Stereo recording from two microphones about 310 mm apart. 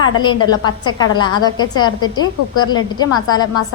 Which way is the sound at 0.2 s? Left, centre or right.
Centre.